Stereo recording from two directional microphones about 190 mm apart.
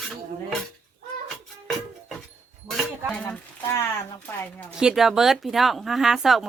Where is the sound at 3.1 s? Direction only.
10° left (ahead or behind).